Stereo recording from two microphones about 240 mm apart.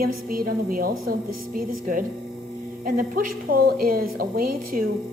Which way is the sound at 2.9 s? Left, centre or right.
Right.